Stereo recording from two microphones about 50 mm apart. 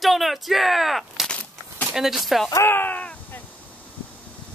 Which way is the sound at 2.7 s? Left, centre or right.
Left.